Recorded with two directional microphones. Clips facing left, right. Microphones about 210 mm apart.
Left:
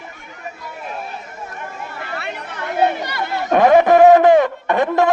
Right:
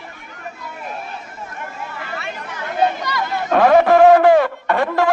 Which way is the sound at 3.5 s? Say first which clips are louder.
Left 1 dB; 15° left (ahead or behind).